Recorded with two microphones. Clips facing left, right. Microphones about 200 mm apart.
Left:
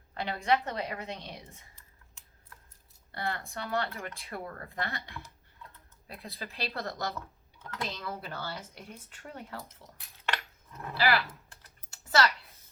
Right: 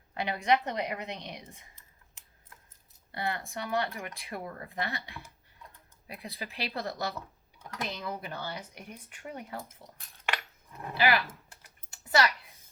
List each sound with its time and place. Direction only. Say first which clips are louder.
0.1 s speech: right 1 dB; 15° right (ahead or behind)
10.2 s typing: even; 15° right (ahead or behind)